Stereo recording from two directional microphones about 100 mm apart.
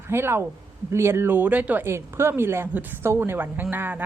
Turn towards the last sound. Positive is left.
turn(degrees=-20)  # may be behind; listen again after turning